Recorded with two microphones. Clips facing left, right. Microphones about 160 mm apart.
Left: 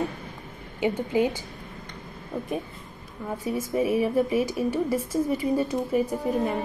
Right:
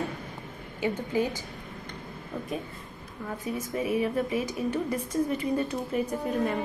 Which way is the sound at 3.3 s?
15° left (ahead or behind).